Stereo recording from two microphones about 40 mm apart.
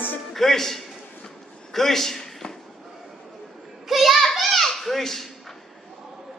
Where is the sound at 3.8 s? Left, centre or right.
Centre.